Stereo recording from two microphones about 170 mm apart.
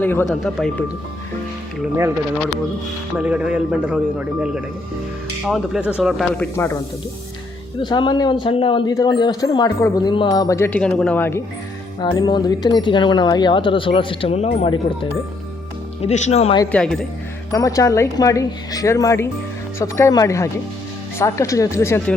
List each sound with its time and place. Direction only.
0.0 s speech: 10° left (ahead or behind)
3.2 s speech: 5° right (ahead or behind)
7.8 s speech: 25° left (ahead or behind)
11.9 s speech: 25° left (ahead or behind)
16.0 s speech: 40° left (ahead or behind)
16.7 s speech: 5° left (ahead or behind)
17.5 s speech: 20° left (ahead or behind)